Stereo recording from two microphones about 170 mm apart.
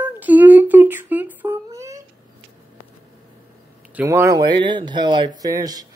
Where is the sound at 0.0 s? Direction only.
10° right (ahead or behind).